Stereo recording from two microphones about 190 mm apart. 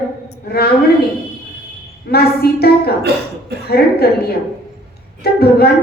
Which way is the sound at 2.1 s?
55° left (ahead or behind).